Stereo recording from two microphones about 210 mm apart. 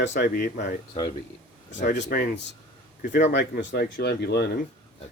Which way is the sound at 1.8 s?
50° left (ahead or behind).